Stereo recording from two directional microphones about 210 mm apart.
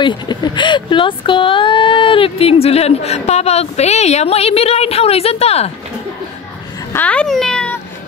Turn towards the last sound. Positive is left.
turn(degrees=5)  # may be behind; listen again after turning